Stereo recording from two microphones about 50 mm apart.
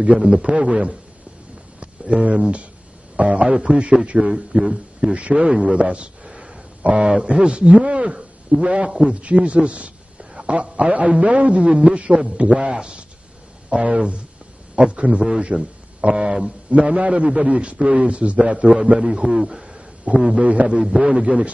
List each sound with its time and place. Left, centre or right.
0.0 s a man's voice: centre
1.8 s a sound: right
3.2 s a man's voice: right
6.2 s a sound: centre
6.8 s a man's voice: centre
9.1 s a man's voice: right
16.2 s a man's voice: centre
16.4 s a man's voice: right; by 19.8 s centre
20.3 s a man's voice: right
20.7 s a man's voice: centre